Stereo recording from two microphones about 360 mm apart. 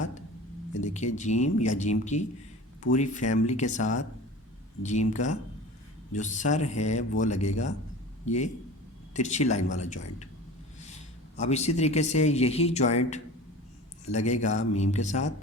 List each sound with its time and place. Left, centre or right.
0.8 s speech: centre
11.3 s speech: centre